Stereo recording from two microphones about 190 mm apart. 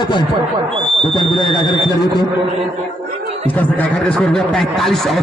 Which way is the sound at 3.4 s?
5° left (ahead or behind).